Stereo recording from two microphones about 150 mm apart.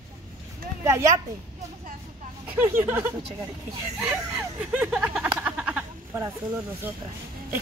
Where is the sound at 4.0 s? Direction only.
5° right (ahead or behind).